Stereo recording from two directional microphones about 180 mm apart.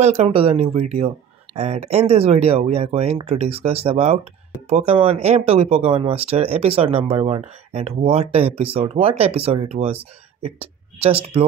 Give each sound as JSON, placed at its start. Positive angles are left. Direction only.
{"t": 0.0, "sound": "speech", "side_deg": -35}